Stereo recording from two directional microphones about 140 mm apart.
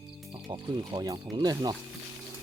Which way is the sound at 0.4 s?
35° right (ahead or behind).